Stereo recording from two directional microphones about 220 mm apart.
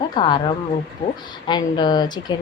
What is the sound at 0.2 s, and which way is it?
Speech, 20° left (ahead or behind).